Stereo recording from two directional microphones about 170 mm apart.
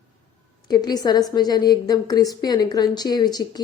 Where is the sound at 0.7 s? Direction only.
25° left (ahead or behind).